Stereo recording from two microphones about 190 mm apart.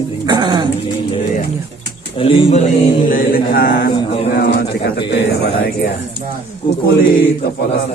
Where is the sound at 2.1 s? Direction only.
30° left (ahead or behind); by 3.9 s 50° left (ahead or behind).